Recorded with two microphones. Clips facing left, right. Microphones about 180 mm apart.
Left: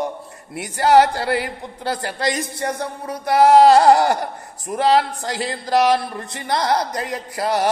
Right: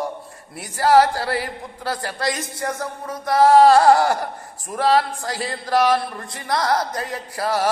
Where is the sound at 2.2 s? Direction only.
20° left (ahead or behind).